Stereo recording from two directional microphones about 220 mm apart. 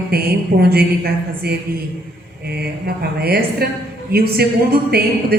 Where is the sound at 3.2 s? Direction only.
45° right (ahead or behind).